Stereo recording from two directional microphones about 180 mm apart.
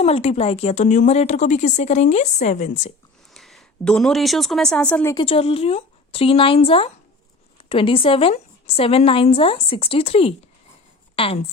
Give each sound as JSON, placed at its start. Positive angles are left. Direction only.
{"t": 0.0, "sound": "a woman's voice", "side_deg": 35}
{"t": 3.3, "sound": "a woman's voice", "side_deg": 0}
{"t": 5.1, "sound": "a woman's voice", "side_deg": 30}